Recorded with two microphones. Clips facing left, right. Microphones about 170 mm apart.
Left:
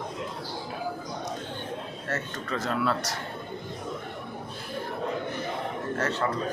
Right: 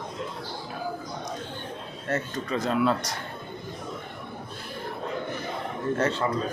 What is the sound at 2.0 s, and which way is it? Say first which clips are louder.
Speech: right 5 dB; 15° right (ahead or behind).